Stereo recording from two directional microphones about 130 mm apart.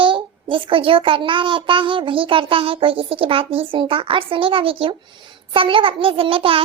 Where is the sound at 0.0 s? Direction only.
40° right (ahead or behind).